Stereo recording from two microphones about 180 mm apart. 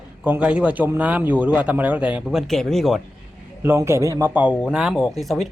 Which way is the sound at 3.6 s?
15° right (ahead or behind).